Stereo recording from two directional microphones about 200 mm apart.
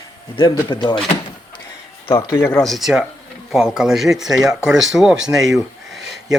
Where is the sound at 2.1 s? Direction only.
15° left (ahead or behind).